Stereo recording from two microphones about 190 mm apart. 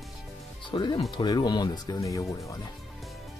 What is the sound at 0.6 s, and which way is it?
Speech, 25° left (ahead or behind).